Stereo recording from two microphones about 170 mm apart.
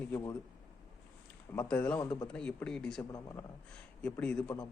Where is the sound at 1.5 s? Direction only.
10° left (ahead or behind).